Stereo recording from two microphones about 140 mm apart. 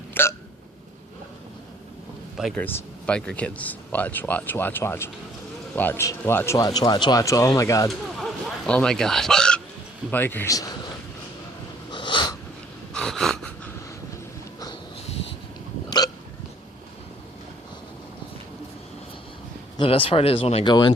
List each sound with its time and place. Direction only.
0.1 s hiccup: 15° left (ahead or behind)
2.6 s a man's voice: 15° left (ahead or behind)
7.9 s speech: centre (ahead or behind); by 10.8 s 25° left (ahead or behind)
11.9 s snort: 35° left (ahead or behind)
12.9 s a sound: 5° left (ahead or behind)
19.7 s speech: 40° left (ahead or behind)
20.7 s speech: 30° left (ahead or behind)